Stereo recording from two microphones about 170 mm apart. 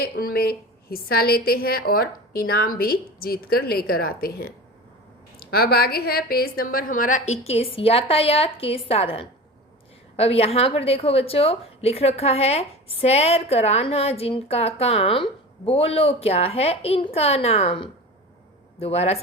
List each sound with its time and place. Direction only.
0.0 s a woman's voice: 60° left (ahead or behind); by 19.2 s 35° left (ahead or behind)